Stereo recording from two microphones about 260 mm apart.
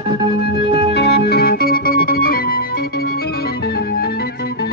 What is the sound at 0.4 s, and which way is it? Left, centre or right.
Organ, left.